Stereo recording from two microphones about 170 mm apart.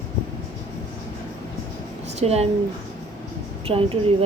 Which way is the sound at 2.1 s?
40° right (ahead or behind).